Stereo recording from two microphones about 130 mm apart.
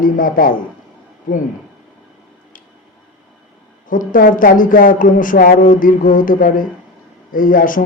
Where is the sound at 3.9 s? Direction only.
90° left.